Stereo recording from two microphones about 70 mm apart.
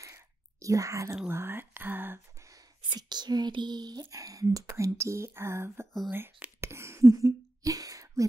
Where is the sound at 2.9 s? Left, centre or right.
Right.